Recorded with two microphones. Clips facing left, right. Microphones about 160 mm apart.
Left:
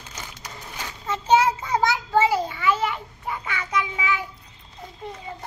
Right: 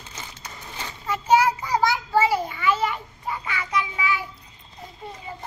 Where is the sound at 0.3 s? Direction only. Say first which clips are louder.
Left 1 dB; 10° left (ahead or behind).